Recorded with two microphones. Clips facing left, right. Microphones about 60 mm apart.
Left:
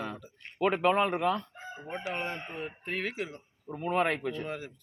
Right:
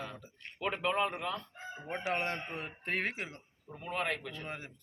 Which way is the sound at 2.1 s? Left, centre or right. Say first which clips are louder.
Right 1 dB; right.